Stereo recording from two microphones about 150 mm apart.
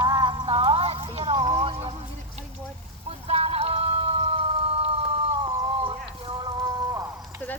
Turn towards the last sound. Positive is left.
turn(degrees=-25)  # may be behind; listen again after turning